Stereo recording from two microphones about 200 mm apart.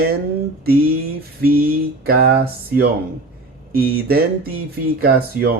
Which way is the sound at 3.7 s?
50° right (ahead or behind).